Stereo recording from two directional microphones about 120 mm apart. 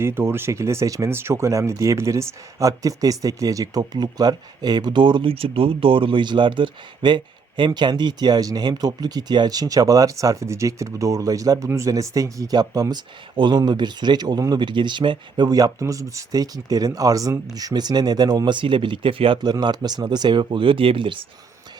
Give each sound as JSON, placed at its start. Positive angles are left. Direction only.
{"t": 0.0, "sound": "speech", "side_deg": -20}